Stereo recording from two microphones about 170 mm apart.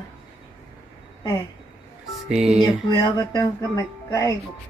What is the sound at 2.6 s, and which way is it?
Speech, 25° left (ahead or behind).